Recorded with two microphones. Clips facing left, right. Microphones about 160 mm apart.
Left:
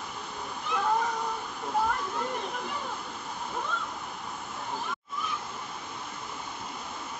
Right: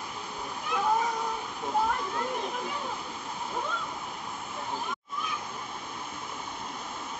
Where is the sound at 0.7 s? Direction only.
5° right (ahead or behind).